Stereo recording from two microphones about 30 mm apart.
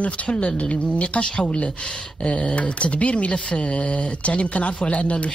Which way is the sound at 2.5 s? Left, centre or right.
Left.